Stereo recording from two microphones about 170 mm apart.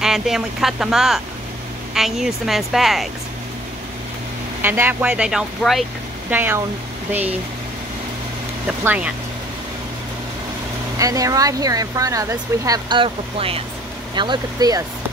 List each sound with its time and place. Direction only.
0.0 s speech: centre (ahead or behind)
4.6 s speech: 10° right (ahead or behind)
6.3 s speech: 10° right (ahead or behind)
8.6 s speech: 10° right (ahead or behind)
11.0 s speech: 20° right (ahead or behind)